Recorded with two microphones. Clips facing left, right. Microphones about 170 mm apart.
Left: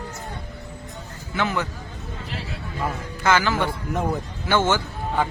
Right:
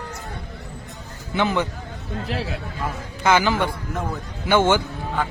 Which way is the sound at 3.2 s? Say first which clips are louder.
Right 2 dB; 15° right (ahead or behind).